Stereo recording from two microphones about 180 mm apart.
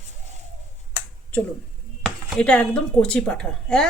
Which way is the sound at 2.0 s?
5° left (ahead or behind).